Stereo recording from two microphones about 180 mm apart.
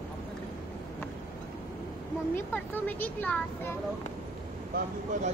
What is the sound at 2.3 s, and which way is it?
Speech, 10° left (ahead or behind).